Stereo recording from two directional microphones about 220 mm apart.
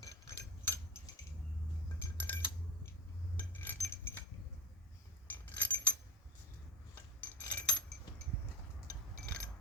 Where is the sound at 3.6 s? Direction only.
10° left (ahead or behind).